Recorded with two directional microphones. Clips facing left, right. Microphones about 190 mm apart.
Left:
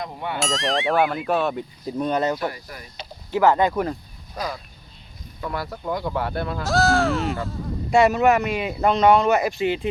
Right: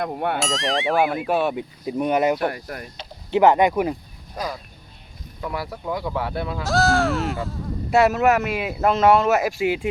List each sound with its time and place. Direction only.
0.0 s speech: 55° right (ahead or behind)
0.3 s speech: centre (ahead or behind)
2.4 s speech: 55° right (ahead or behind)
3.3 s speech: 20° right (ahead or behind)
5.4 s speech: 10° right (ahead or behind)